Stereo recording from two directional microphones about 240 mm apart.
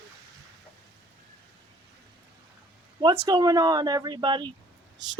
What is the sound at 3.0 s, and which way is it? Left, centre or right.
Speech, centre.